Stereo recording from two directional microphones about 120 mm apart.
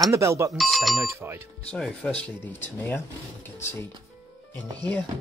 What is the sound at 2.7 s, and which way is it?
Speech, 20° left (ahead or behind).